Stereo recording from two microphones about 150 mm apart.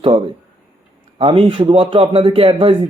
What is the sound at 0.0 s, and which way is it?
A man's voice, 35° right (ahead or behind).